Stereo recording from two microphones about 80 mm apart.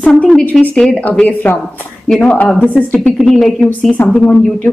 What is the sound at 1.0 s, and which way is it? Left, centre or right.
Speech, centre.